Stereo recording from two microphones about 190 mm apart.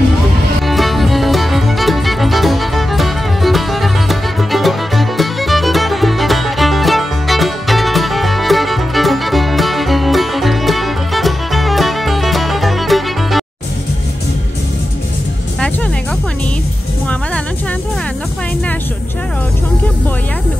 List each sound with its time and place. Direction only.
0.6 s music: centre (ahead or behind)